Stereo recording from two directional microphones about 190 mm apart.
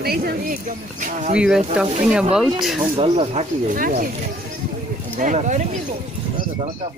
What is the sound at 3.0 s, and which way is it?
Speech, 30° right (ahead or behind).